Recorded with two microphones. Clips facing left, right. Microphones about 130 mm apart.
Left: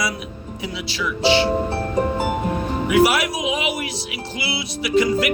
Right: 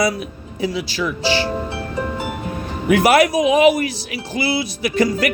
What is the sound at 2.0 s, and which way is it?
Music, 40° left (ahead or behind).